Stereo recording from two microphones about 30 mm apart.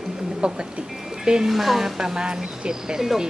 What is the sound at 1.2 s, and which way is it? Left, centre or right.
Speech, right.